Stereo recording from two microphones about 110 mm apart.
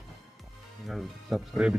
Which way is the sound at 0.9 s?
Centre (ahead or behind).